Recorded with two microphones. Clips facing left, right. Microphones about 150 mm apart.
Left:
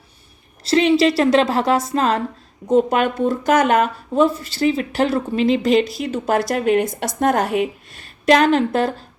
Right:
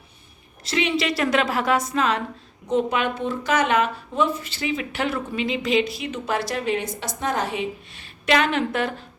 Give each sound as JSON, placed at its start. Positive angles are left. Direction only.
{"t": 0.6, "sound": "speech", "side_deg": 35}